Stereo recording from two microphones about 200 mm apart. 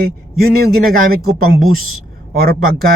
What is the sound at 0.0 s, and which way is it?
Speech, 50° right (ahead or behind).